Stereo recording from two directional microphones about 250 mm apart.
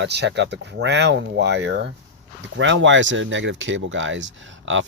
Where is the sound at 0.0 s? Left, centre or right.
Right.